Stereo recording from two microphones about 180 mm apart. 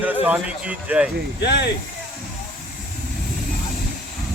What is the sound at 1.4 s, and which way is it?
Speech, 70° left (ahead or behind).